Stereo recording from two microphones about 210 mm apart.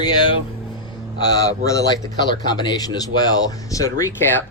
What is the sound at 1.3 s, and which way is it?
Speech, 15° left (ahead or behind).